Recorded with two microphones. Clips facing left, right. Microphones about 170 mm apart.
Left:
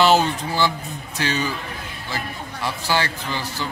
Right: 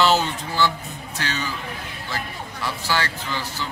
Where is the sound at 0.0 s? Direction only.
15° left (ahead or behind).